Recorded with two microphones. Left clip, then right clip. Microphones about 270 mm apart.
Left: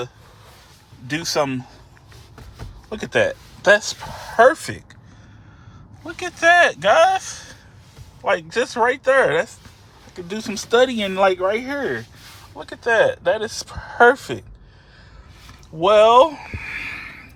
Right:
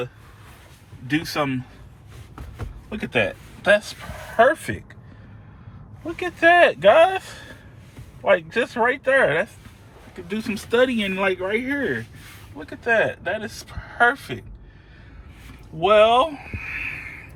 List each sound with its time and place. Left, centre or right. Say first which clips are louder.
1.1 s speech: left 2 dB; left
2.9 s speech: left 3 dB; centre
6.1 s speech: left 1 dB; centre
10.8 s speech: left 1 dB; left
11.2 s speech: left 7 dB; centre
15.8 s speech: left 3 dB; centre; by 16.9 s left